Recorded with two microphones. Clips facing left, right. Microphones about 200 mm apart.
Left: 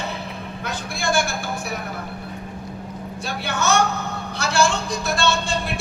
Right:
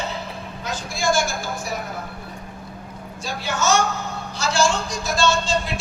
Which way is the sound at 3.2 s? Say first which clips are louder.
Right 1 dB; 60° left (ahead or behind).